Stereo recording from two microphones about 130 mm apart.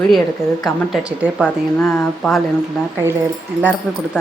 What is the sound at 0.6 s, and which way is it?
Speech, 5° right (ahead or behind).